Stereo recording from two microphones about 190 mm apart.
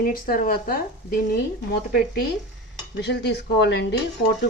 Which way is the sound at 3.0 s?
60° left (ahead or behind).